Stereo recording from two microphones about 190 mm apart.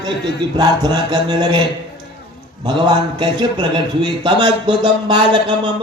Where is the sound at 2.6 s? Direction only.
25° right (ahead or behind).